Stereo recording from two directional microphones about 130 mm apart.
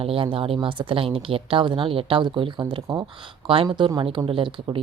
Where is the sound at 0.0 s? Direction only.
45° right (ahead or behind).